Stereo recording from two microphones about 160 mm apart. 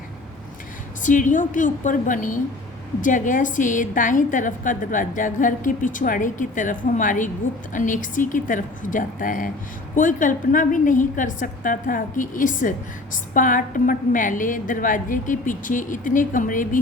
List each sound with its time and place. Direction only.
1.0 s a woman's voice: 55° left (ahead or behind)